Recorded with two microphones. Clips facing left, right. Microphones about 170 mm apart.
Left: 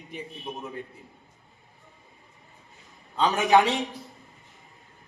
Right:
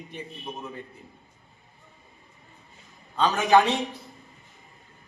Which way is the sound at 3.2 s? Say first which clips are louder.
Even; 20° left (ahead or behind).